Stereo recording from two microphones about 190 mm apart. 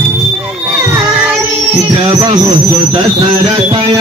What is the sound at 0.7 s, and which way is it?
Children shouting, 10° right (ahead or behind).